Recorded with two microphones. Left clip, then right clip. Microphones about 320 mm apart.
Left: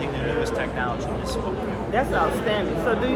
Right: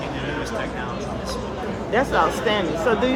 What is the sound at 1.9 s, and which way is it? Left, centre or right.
Speech, right.